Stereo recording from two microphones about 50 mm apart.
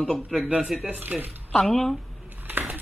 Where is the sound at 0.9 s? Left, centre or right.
Right.